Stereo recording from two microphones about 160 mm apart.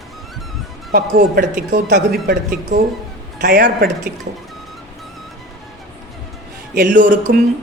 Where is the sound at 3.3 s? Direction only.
75° right (ahead or behind).